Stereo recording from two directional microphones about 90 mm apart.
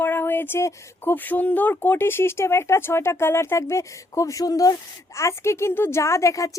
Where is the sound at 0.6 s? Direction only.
20° left (ahead or behind).